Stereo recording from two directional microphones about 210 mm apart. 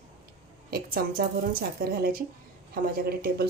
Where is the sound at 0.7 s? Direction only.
45° right (ahead or behind).